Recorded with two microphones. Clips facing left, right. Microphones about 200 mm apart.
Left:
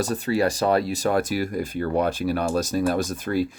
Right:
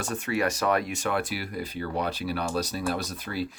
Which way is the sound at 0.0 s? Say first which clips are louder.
Left 5 dB; 35° left (ahead or behind).